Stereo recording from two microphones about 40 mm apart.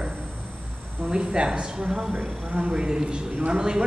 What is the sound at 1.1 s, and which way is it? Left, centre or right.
Speech, right.